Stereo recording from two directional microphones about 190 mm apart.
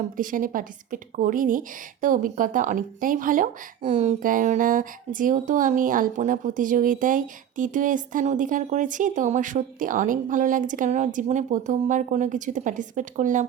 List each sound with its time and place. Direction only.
0.2 s speech: 45° right (ahead or behind)